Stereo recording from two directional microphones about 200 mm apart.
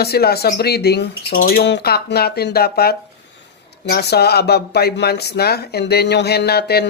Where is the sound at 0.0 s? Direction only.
50° left (ahead or behind).